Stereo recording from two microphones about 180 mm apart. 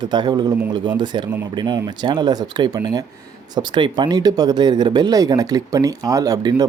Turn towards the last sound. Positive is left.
turn(degrees=-20)  # may be behind; listen again after turning